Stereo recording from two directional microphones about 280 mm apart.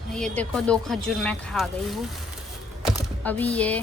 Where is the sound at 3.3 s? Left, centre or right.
Centre.